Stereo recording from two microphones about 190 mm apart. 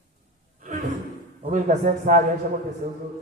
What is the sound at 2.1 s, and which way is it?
Speech, 40° right (ahead or behind).